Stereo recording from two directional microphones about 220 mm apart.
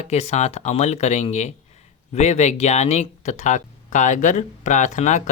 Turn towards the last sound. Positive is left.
turn(degrees=35)  # may be behind; listen again after turning